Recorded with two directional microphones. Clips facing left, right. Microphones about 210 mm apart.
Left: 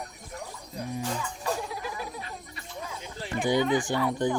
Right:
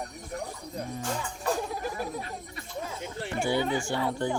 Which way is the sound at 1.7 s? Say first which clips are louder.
Right 3 dB; 45° right (ahead or behind).